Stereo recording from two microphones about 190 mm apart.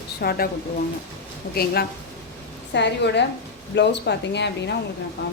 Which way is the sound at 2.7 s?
65° left (ahead or behind).